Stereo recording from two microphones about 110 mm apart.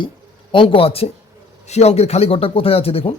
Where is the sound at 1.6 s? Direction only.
80° left; by 3.2 s 60° left (ahead or behind).